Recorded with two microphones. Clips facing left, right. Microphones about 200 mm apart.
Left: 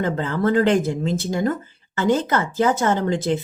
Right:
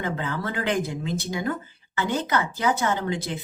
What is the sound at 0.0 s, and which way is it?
Speech, 50° left (ahead or behind).